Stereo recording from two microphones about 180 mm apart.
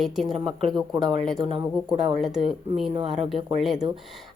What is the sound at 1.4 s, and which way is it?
Speech, 25° right (ahead or behind).